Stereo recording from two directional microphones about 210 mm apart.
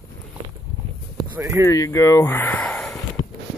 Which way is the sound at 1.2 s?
10° right (ahead or behind).